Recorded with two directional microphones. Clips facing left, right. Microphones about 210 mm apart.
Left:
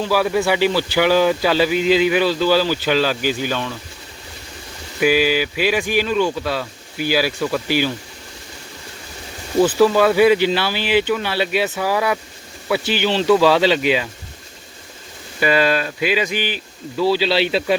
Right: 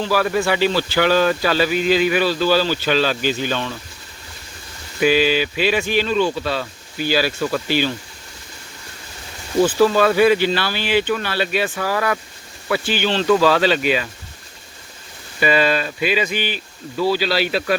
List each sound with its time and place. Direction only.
0.0 s speech: 10° left (ahead or behind)
4.9 s speech: 10° left (ahead or behind)
9.7 s speech: 10° left (ahead or behind)
15.4 s speech: 10° left (ahead or behind); by 17.7 s 25° left (ahead or behind)